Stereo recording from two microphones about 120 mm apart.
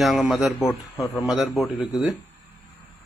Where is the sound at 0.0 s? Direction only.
Centre (ahead or behind).